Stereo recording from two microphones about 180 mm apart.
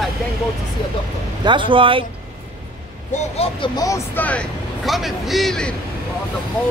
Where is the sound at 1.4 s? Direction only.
25° right (ahead or behind).